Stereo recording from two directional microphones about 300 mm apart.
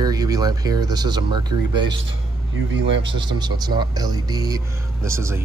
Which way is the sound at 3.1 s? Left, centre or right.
Centre.